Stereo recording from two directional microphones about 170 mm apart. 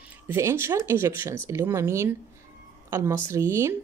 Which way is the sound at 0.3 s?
15° right (ahead or behind).